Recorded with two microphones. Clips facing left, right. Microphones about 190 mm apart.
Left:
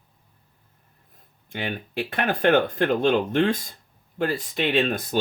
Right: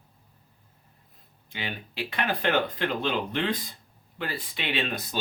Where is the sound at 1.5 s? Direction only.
50° left (ahead or behind).